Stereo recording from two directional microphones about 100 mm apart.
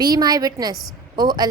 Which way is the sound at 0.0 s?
40° right (ahead or behind).